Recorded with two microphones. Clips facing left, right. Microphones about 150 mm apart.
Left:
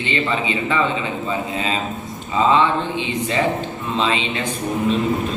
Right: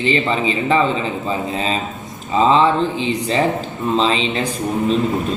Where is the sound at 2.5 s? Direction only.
35° right (ahead or behind).